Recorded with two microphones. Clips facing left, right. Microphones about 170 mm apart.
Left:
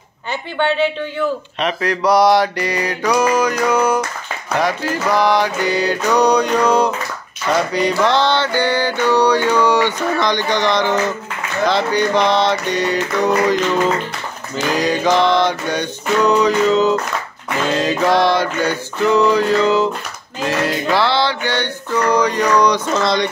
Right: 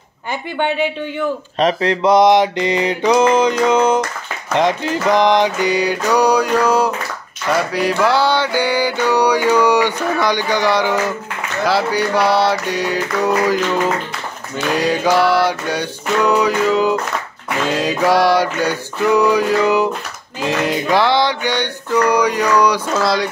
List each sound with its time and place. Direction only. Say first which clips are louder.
0.3 s mantra: left 1 dB; 10° right (ahead or behind)
1.6 s mantra: right 4 dB; 30° right (ahead or behind); by 13.6 s 5° right (ahead or behind)
14.8 s mantra: even; 10° right (ahead or behind)